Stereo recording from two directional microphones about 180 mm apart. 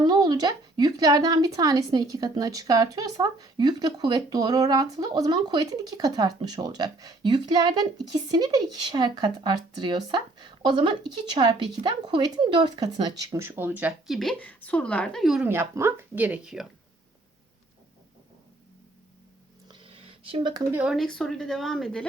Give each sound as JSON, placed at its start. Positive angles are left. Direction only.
{"t": 0.0, "sound": "a woman's voice", "side_deg": -25}
{"t": 19.8, "sound": "a sound", "side_deg": -30}
{"t": 20.7, "sound": "speech", "side_deg": 0}